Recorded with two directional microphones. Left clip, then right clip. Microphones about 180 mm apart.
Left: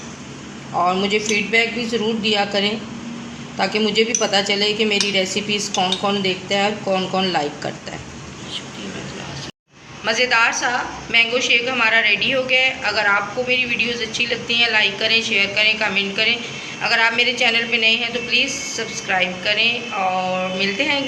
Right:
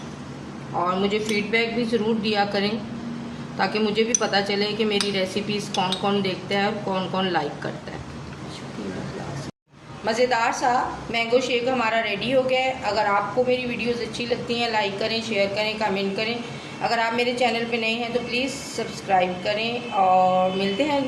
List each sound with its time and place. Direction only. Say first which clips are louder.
1.0 s a woman's voice: left 5 dB; 30° left (ahead or behind)
10.0 s a woman's voice: left 5 dB; 35° right (ahead or behind)